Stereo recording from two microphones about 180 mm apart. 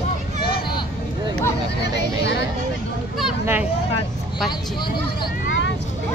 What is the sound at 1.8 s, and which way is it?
Speech, 70° left (ahead or behind).